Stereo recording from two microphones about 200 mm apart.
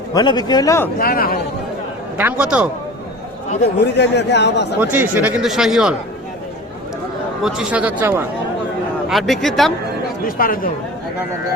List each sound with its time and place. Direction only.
0.1 s a man's voice: 20° left (ahead or behind)
0.9 s a man's voice: 45° left (ahead or behind)
2.1 s speech: 5° right (ahead or behind)
3.9 s a man's voice: 60° left (ahead or behind)
4.8 s speech: 10° right (ahead or behind)
7.4 s speech: 5° right (ahead or behind)
9.0 s speech: centre (ahead or behind)
10.2 s a man's voice: 45° left (ahead or behind)